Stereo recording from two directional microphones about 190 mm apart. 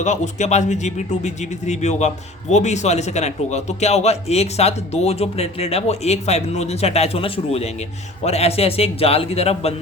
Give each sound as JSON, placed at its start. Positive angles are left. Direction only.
{"t": 0.0, "sound": "speech", "side_deg": 40}